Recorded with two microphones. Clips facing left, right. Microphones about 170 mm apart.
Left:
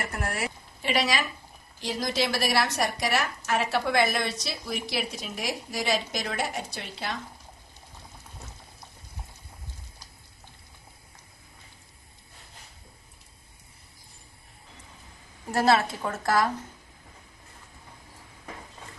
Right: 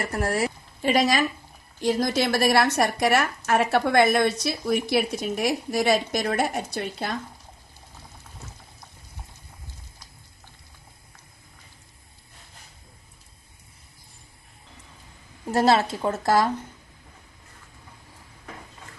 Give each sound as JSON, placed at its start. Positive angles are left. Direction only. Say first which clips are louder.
{"t": 0.0, "sound": "a woman's voice", "louder": "right 7 dB", "side_deg": -35}
{"t": 15.6, "sound": "a woman's voice", "louder": "right 2 dB", "side_deg": -30}